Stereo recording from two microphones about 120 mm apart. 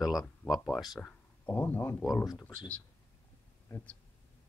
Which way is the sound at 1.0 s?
15° left (ahead or behind).